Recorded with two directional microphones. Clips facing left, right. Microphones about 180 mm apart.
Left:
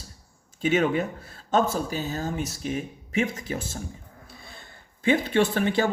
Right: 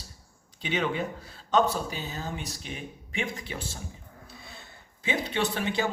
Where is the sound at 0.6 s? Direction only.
45° left (ahead or behind).